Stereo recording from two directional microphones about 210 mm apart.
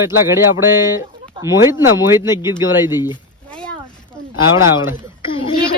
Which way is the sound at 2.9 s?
20° left (ahead or behind).